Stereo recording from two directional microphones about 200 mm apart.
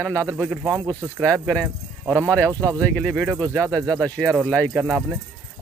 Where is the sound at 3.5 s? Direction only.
15° right (ahead or behind).